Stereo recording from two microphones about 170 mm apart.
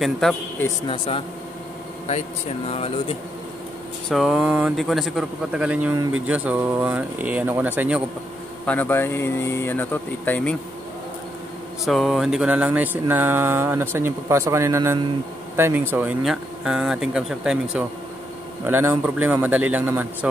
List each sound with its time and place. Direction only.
0.0 s speech: centre (ahead or behind)
0.8 s speech: 30° left (ahead or behind)
2.7 s speech: 35° left (ahead or behind)
4.1 s speech: centre (ahead or behind)
8.6 s speech: 10° left (ahead or behind)
11.8 s speech: centre (ahead or behind)